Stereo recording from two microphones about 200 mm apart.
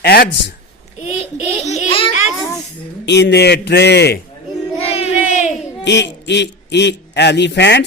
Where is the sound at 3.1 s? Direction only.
60° left (ahead or behind).